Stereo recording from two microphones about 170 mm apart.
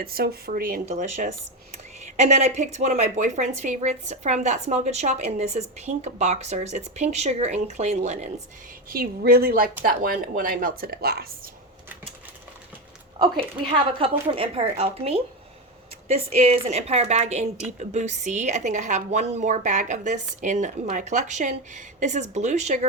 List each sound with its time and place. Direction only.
0.0 s a woman's voice: 65° right (ahead or behind); by 8.3 s 40° right (ahead or behind)
8.9 s a woman's voice: 60° right (ahead or behind)
13.1 s a woman's voice: 25° right (ahead or behind); by 22.9 s 40° right (ahead or behind)